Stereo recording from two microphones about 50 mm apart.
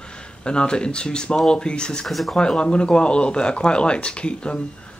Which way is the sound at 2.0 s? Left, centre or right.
Centre.